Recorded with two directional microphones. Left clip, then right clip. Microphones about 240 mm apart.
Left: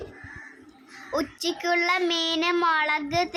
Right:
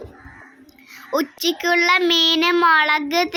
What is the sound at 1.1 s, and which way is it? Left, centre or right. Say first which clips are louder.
A child's voice: right 7 dB; centre.